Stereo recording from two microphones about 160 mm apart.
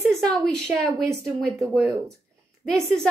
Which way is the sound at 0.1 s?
5° left (ahead or behind).